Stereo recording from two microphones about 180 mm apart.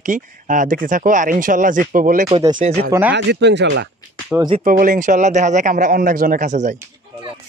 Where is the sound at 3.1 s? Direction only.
75° right (ahead or behind).